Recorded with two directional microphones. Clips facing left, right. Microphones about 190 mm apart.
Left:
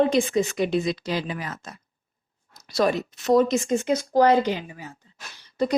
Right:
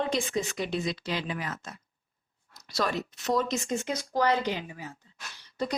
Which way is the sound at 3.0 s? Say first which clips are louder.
Left 9 dB; 50° left (ahead or behind).